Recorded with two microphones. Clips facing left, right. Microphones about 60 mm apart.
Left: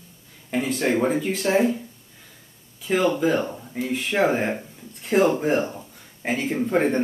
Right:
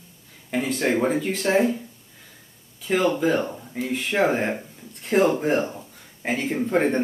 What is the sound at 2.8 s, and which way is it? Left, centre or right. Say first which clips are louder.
Speech: even; centre.